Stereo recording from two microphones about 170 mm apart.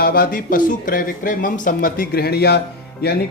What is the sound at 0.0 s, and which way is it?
Speech, 60° left (ahead or behind).